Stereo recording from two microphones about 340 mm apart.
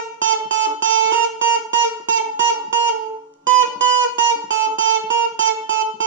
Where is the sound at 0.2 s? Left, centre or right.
Right.